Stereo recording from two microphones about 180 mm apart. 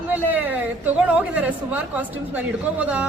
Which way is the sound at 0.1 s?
10° right (ahead or behind).